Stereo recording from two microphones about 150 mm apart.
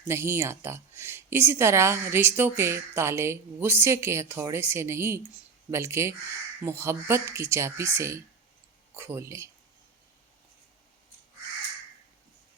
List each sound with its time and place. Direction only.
0.0 s speech: 15° right (ahead or behind)